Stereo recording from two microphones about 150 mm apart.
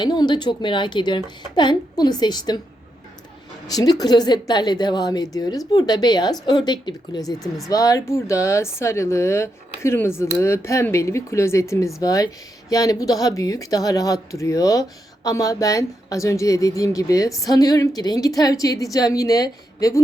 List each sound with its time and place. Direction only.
0.0 s speech: 30° left (ahead or behind)
3.7 s speech: 25° left (ahead or behind)